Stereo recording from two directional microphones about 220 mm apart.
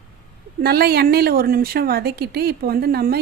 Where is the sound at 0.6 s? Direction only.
45° right (ahead or behind).